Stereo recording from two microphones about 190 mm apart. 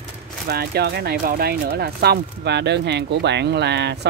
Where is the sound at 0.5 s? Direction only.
55° right (ahead or behind).